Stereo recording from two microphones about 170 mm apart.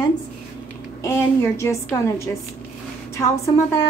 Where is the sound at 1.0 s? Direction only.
15° left (ahead or behind).